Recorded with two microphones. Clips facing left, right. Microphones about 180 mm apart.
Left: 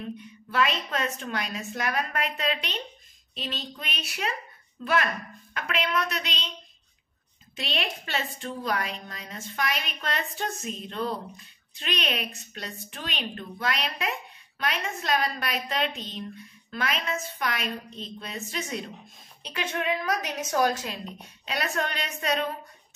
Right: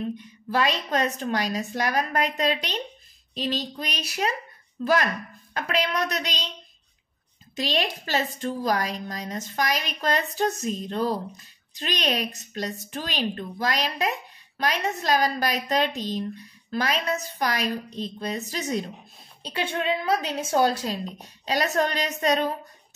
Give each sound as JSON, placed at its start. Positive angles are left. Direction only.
{"t": 0.5, "sound": "a woman's voice", "side_deg": -35}
{"t": 7.5, "sound": "a woman's voice", "side_deg": -40}